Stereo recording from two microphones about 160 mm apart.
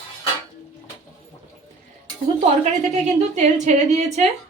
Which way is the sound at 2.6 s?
45° right (ahead or behind).